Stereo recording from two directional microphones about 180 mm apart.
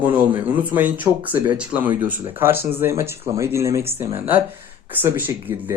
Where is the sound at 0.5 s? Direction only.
10° right (ahead or behind).